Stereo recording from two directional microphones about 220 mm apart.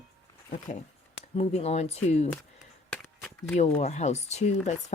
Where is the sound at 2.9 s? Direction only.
10° left (ahead or behind).